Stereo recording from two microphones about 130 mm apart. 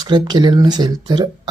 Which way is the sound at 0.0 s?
35° right (ahead or behind).